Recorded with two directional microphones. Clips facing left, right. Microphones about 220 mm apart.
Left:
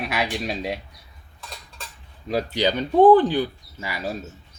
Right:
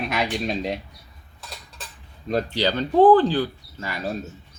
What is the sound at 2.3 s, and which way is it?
Speech, 10° left (ahead or behind).